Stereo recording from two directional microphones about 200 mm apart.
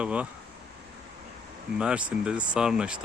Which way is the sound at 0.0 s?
5° right (ahead or behind).